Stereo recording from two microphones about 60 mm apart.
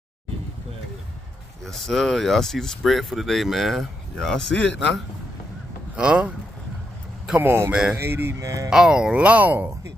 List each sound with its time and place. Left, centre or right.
1.6 s speech: centre
5.9 s speech: centre
7.3 s speech: right
7.7 s speech: centre
8.0 s speech: right
8.4 s speech: right
8.6 s speech: centre; by 9.7 s right